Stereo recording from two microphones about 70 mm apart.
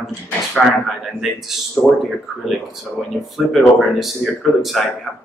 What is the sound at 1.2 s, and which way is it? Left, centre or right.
Speech, centre.